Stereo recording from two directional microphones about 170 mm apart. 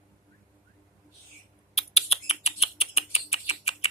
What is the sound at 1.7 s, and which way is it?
Rodents, 35° left (ahead or behind).